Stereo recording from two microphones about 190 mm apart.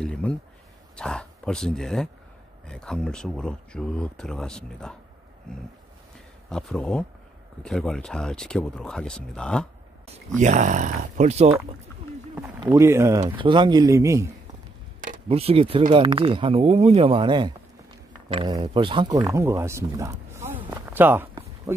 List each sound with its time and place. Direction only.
0.0 s a sound: 5° left (ahead or behind)
2.6 s speech: 5° left (ahead or behind)
6.5 s speech: 5° left (ahead or behind)
10.4 s speech: 40° right (ahead or behind)
12.6 s speech: 15° right (ahead or behind)
13.2 s speech: 25° right (ahead or behind)
15.2 s speech: 30° right (ahead or behind); by 20.6 s 15° right (ahead or behind)
20.9 s a sound: 10° right (ahead or behind)